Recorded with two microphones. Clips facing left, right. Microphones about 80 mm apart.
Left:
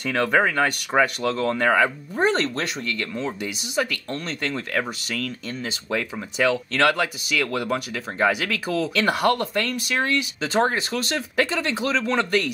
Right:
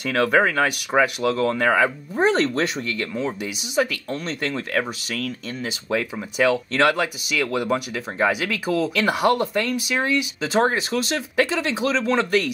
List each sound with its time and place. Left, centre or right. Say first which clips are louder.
0.0 s speech: right 2 dB; centre